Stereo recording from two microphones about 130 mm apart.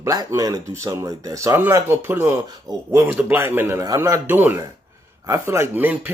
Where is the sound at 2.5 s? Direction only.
30° right (ahead or behind).